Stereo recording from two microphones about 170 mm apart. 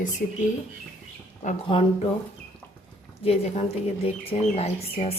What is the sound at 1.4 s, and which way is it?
Speech, 40° left (ahead or behind).